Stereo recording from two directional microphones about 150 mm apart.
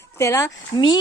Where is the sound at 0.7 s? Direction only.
30° left (ahead or behind).